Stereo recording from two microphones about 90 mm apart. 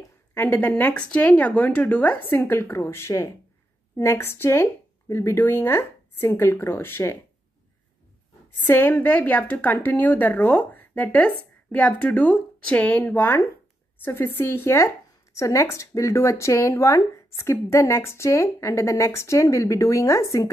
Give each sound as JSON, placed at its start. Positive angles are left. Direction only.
{"t": 0.3, "sound": "a woman's voice", "side_deg": 20}
{"t": 8.6, "sound": "a woman's voice", "side_deg": 25}